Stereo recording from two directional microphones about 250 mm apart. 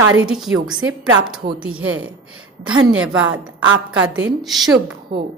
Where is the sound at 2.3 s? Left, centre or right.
Right.